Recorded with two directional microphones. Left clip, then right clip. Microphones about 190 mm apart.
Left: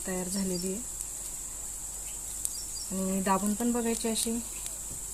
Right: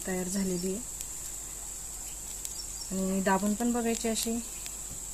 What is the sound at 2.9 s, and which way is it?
Speech, 15° right (ahead or behind).